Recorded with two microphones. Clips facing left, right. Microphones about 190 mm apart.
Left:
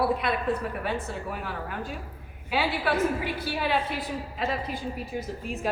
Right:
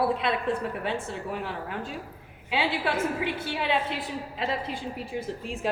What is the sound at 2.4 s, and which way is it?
A woman's voice, 25° right (ahead or behind).